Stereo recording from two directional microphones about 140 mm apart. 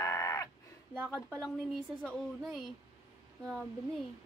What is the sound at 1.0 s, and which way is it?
Speech, 5° left (ahead or behind).